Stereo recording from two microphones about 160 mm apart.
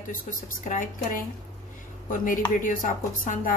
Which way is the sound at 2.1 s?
60° left (ahead or behind).